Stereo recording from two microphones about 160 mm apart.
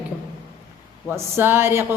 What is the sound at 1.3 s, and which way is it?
Music, 15° right (ahead or behind).